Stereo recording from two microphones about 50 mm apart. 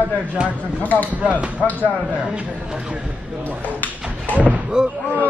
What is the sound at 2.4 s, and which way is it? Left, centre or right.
Speech, right.